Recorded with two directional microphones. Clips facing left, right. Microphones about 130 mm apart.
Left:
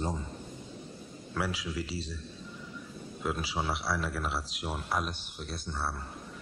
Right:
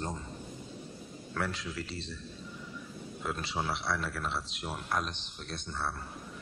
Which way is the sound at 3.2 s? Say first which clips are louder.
Left 2 dB; 5° left (ahead or behind).